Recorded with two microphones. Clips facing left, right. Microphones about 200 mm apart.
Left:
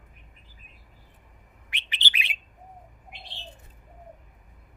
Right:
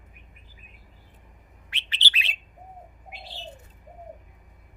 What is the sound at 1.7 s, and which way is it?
Bird, 15° left (ahead or behind).